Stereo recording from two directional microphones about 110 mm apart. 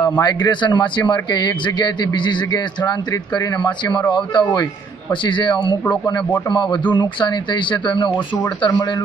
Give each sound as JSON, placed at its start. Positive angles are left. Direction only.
{"t": 0.2, "sound": "speech", "side_deg": 40}